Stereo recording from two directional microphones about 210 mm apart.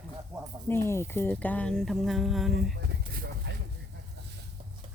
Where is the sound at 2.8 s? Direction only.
45° right (ahead or behind).